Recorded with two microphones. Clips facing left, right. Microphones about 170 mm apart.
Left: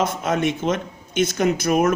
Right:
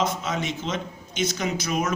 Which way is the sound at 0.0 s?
55° left (ahead or behind).